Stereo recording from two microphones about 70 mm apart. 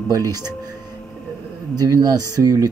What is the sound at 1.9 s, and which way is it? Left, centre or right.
Speech, right.